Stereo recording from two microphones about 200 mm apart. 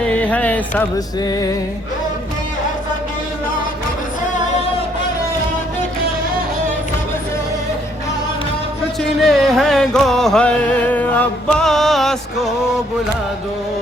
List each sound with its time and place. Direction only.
0.0 s music: 5° left (ahead or behind)
0.9 s music: 20° left (ahead or behind)
9.2 s music: centre (ahead or behind)